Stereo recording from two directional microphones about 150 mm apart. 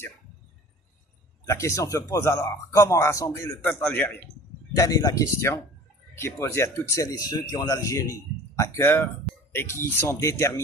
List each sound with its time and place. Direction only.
1.4 s speech: 20° left (ahead or behind)
4.7 s speech: 25° left (ahead or behind)